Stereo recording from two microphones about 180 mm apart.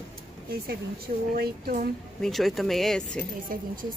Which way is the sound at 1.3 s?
55° right (ahead or behind).